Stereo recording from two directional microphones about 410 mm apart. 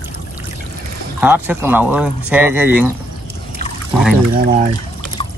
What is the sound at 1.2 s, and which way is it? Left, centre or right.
Speech, centre.